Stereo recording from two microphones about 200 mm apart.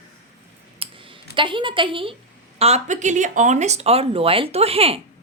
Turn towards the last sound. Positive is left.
turn(degrees=-30)  # may be behind; listen again after turning